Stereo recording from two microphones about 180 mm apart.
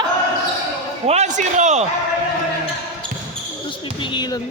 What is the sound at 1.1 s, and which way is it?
Speech, 40° right (ahead or behind).